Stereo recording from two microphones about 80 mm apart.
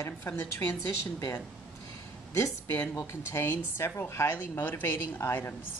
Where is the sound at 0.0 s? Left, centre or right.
Left.